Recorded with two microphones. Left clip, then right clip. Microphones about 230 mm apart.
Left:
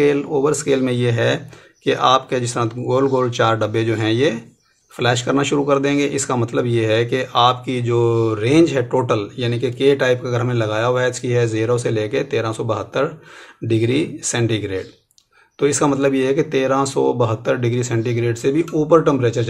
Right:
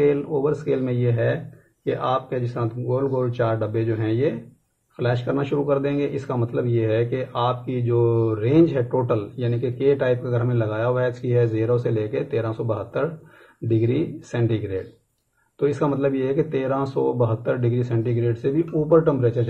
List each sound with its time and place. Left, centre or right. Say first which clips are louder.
0.0 s speech: left 4 dB; left